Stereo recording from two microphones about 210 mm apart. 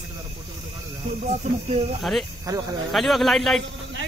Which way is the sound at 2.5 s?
20° right (ahead or behind).